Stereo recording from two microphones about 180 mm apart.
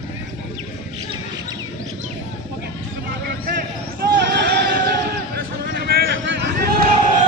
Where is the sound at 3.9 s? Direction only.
60° right (ahead or behind).